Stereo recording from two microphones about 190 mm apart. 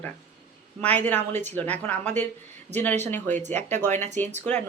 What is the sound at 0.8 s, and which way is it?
Speech, 10° left (ahead or behind).